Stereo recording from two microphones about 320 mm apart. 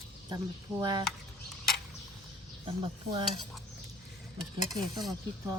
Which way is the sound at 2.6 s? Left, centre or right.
Centre.